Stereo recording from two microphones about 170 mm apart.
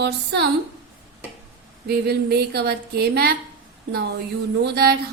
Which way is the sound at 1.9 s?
70° right (ahead or behind).